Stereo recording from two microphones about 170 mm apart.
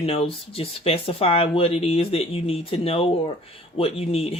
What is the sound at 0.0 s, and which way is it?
Speech, 35° left (ahead or behind).